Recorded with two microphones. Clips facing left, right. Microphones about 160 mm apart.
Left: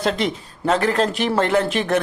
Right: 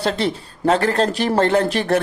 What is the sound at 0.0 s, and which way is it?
Speech, 35° right (ahead or behind).